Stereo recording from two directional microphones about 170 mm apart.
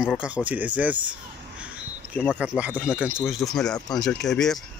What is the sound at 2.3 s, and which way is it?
Speech, 10° right (ahead or behind).